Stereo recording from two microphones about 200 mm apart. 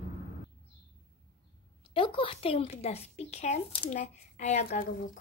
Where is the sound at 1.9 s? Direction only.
25° left (ahead or behind).